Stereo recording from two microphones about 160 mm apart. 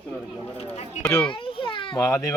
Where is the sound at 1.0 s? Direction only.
10° left (ahead or behind).